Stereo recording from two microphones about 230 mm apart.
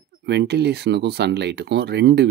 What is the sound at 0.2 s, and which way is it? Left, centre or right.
Speech, right.